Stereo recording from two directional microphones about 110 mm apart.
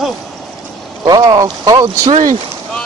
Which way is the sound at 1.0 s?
35° right (ahead or behind).